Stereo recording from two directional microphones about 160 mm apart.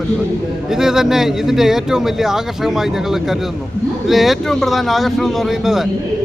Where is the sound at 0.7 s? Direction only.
5° right (ahead or behind).